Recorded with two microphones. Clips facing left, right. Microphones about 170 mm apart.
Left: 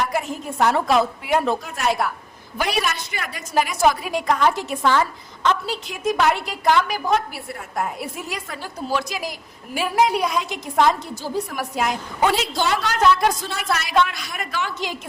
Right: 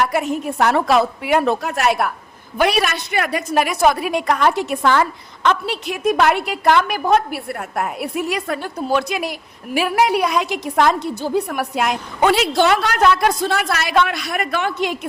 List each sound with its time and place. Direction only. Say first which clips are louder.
0.0 s a woman's voice: right 5 dB; 70° right (ahead or behind)